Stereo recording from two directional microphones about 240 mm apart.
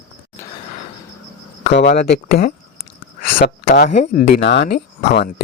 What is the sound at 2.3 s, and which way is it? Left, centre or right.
Speech, left.